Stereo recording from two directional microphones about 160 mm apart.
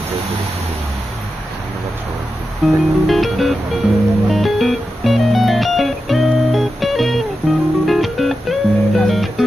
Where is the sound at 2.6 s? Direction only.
Centre (ahead or behind).